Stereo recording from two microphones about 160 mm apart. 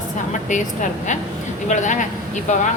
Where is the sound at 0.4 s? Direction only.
50° left (ahead or behind).